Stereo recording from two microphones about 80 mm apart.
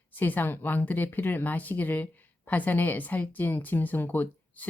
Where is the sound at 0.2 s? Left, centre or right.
Left.